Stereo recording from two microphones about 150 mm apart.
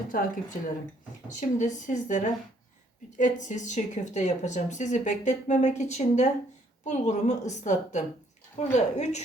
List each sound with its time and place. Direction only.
0.1 s speech: 70° left (ahead or behind)
1.4 s a woman's voice: 55° left (ahead or behind)